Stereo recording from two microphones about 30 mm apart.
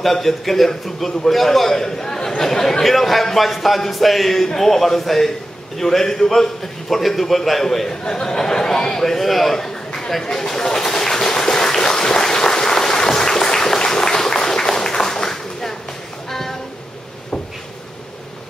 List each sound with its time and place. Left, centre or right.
0.0 s a man's voice: centre
2.8 s a man's voice: centre
9.0 s a man's voice: centre
10.3 s a sound: centre